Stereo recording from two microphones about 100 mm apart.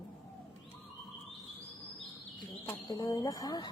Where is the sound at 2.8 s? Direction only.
35° left (ahead or behind).